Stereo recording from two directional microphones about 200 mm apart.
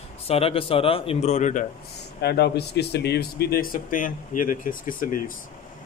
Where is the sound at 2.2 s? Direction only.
55° left (ahead or behind).